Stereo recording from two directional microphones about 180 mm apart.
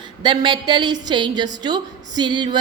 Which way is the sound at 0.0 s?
25° right (ahead or behind).